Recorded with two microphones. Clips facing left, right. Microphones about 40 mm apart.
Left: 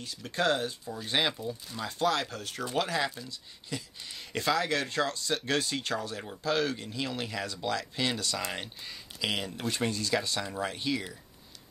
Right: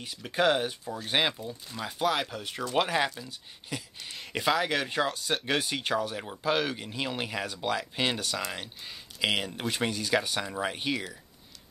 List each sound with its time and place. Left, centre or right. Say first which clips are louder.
0.0 s speech: right 3 dB; right
1.5 s speech: even; centre
2.7 s speech: right 3 dB; right
4.1 s speech: right 2 dB; centre